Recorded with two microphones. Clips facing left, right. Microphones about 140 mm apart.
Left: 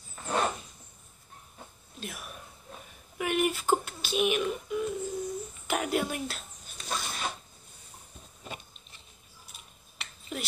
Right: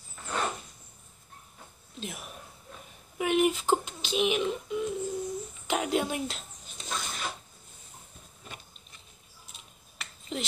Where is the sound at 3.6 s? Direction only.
20° right (ahead or behind).